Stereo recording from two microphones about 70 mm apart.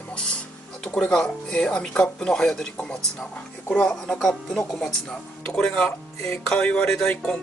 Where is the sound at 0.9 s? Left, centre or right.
Centre.